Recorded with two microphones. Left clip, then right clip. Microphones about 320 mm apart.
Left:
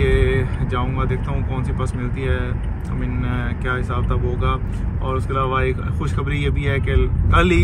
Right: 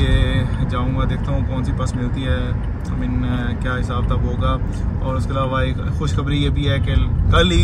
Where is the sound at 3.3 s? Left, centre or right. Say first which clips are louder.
Left 3 dB; left.